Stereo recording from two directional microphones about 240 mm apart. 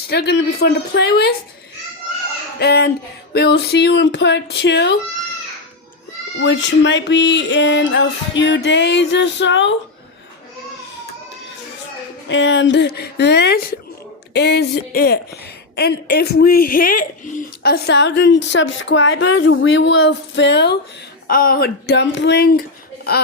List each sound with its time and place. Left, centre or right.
0.1 s speech: left
2.6 s speech: left
6.4 s speech: left
12.3 s speech: left